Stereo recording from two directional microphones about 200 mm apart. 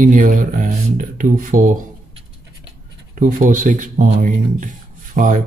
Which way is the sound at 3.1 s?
40° right (ahead or behind).